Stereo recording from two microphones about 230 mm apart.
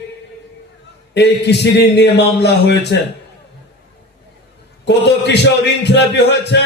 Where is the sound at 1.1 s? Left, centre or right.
Left.